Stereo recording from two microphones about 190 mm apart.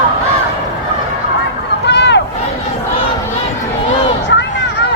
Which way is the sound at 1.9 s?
65° left (ahead or behind).